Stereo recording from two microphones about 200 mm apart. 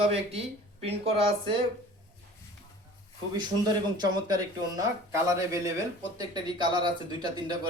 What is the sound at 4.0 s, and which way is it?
Speech, 20° right (ahead or behind).